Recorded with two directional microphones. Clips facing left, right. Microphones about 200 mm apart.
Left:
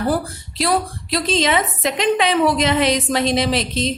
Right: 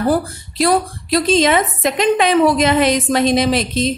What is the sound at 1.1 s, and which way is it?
A woman's voice, 50° right (ahead or behind).